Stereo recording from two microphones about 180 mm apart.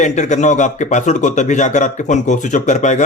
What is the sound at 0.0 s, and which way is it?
Speech, 40° left (ahead or behind).